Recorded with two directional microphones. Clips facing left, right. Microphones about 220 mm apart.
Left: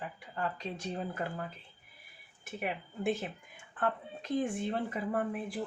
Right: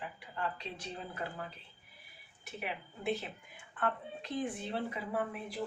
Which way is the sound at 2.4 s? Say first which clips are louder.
Left 4 dB; 50° left (ahead or behind).